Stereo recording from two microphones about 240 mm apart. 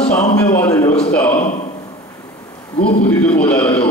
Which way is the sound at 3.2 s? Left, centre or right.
Centre.